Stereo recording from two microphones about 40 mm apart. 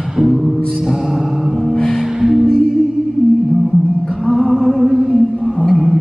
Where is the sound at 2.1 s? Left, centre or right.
Centre.